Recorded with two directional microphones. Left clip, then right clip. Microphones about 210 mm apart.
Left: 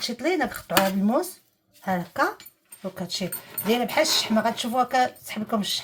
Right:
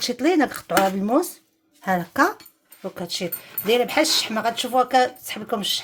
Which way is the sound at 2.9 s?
40° right (ahead or behind).